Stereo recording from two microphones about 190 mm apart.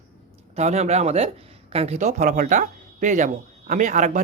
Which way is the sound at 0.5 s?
35° right (ahead or behind).